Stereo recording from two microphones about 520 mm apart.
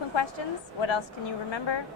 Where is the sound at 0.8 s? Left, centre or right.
Left.